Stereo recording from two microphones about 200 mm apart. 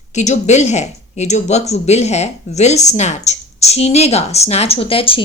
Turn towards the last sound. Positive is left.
turn(degrees=25)  # may be behind; listen again after turning